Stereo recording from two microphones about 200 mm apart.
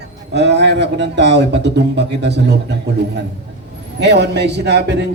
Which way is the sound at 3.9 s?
60° right (ahead or behind).